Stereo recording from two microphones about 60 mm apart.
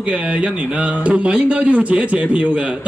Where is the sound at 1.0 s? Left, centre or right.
Right.